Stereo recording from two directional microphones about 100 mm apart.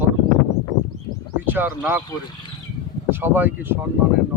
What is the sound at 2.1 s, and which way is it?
Speech, 45° left (ahead or behind).